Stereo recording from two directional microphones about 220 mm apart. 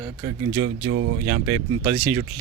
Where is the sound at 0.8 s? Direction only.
65° right (ahead or behind).